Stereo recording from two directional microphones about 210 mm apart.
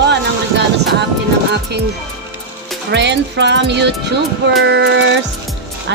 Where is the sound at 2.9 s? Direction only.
60° right (ahead or behind).